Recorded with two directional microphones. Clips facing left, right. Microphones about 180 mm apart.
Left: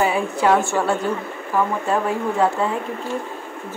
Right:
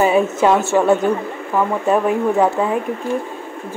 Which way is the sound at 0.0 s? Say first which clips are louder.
Right 5 dB; 20° right (ahead or behind).